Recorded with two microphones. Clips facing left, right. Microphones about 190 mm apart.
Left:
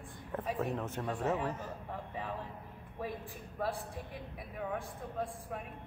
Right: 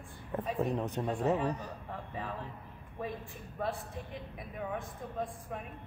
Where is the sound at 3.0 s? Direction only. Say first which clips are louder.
Right 1 dB; 5° left (ahead or behind).